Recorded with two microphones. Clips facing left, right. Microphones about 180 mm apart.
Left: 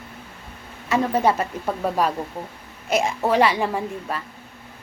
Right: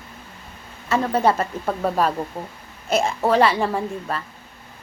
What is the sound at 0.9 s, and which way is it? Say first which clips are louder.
Speech: even; 10° left (ahead or behind).